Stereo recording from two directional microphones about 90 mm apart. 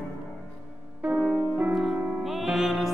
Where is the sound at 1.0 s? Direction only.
15° right (ahead or behind).